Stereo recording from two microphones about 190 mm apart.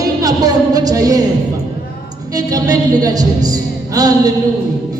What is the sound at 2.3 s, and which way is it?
Speech, 20° right (ahead or behind).